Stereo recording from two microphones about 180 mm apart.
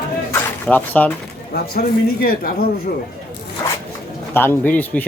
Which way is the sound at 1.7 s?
55° left (ahead or behind).